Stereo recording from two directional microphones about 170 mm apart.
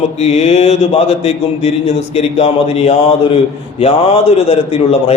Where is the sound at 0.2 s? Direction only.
40° left (ahead or behind).